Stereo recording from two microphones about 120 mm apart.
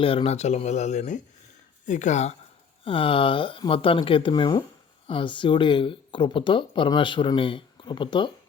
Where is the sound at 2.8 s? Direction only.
50° left (ahead or behind).